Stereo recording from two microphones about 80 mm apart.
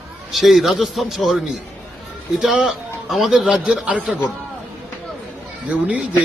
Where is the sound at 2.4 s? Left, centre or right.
Centre.